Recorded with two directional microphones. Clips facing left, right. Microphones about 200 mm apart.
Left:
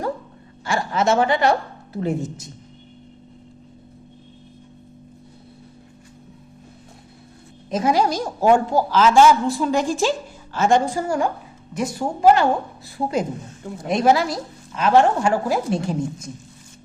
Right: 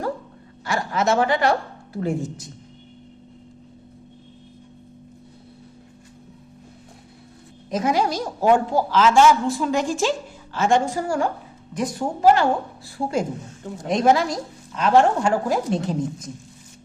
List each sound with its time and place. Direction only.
0.6 s a woman's voice: 25° left (ahead or behind)
7.7 s a woman's voice: 30° left (ahead or behind)
8.1 s a woman's voice: 45° left (ahead or behind); by 11.3 s 20° left (ahead or behind)
11.7 s a woman's voice: 10° left (ahead or behind)
12.3 s a woman's voice: 20° left (ahead or behind)
13.8 s a woman's voice: 5° left (ahead or behind)